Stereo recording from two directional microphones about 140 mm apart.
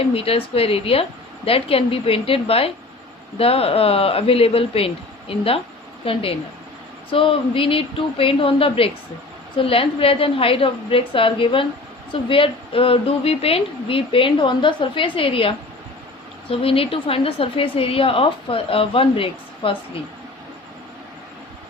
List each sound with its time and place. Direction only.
0.1 s a woman's voice: 45° left (ahead or behind)